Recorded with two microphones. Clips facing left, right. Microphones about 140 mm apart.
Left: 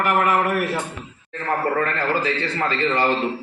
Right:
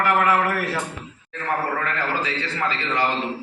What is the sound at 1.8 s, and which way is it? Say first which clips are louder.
Speech: left 4 dB; 45° left (ahead or behind).